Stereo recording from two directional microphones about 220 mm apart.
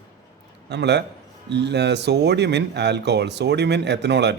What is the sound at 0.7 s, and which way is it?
Speech, 50° right (ahead or behind).